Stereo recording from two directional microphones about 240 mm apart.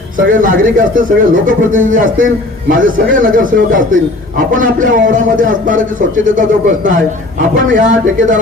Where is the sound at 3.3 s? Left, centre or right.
Right.